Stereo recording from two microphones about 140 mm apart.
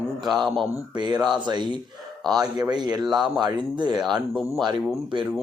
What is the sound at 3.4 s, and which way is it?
Speech, 30° right (ahead or behind).